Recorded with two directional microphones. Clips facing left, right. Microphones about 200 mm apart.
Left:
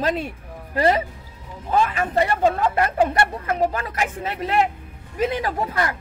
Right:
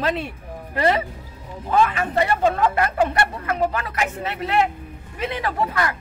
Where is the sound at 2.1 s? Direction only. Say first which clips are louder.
Even; 40° left (ahead or behind).